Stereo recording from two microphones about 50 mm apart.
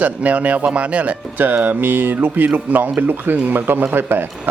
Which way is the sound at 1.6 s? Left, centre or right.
Right.